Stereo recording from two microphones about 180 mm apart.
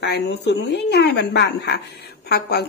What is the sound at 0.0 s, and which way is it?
A woman's voice, 65° left (ahead or behind).